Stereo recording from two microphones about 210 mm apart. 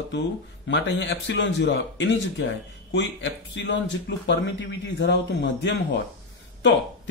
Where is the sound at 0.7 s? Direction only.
60° left (ahead or behind).